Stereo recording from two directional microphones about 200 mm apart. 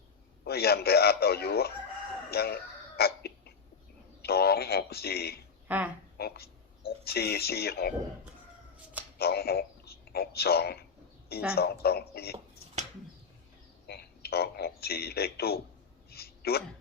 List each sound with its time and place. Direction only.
0.4 s a man's voice: 50° left (ahead or behind)
2.3 s a sound: 50° left (ahead or behind)
4.2 s a man's voice: 50° left (ahead or behind)
5.6 s a woman's voice: 10° right (ahead or behind)
6.1 s speech: 50° left (ahead or behind)
9.1 s a man's voice: 50° left (ahead or behind)
13.8 s a man's voice: 55° left (ahead or behind)
16.0 s a sound: 50° left (ahead or behind)